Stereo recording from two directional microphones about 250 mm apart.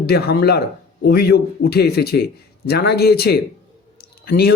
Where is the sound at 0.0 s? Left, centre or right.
Left.